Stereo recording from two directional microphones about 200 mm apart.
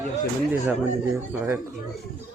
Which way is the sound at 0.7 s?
10° right (ahead or behind).